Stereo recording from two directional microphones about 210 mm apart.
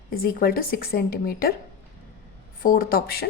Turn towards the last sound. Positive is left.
turn(degrees=45)  # may be behind; listen again after turning